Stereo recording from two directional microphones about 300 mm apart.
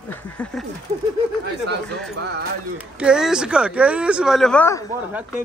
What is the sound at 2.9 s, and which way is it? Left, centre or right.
Speech, centre.